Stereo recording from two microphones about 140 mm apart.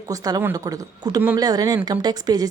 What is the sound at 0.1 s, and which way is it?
A woman's voice, 25° right (ahead or behind).